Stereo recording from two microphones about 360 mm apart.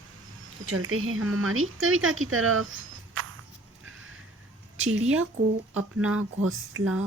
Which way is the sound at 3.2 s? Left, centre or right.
Right.